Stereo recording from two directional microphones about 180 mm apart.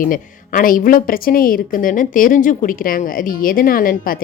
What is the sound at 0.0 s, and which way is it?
A woman's voice, 50° left (ahead or behind).